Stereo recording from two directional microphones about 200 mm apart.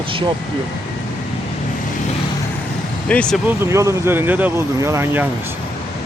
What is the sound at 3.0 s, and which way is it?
Speech, 5° left (ahead or behind).